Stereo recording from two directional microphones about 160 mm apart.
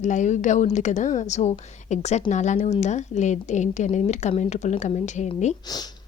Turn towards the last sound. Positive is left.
turn(degrees=25)  # may be behind; listen again after turning